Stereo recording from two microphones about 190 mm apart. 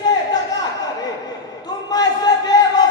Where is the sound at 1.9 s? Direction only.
20° left (ahead or behind).